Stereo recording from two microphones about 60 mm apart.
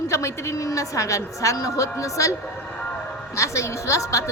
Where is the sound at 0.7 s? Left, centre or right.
Left.